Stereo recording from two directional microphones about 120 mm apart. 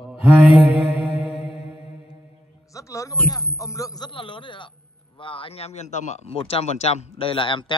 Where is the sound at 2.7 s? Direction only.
25° left (ahead or behind).